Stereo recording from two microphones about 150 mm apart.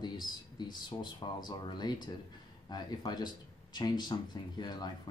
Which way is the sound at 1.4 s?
30° left (ahead or behind).